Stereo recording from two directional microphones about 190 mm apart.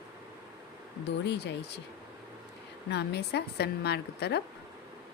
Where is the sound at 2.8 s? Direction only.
60° left (ahead or behind).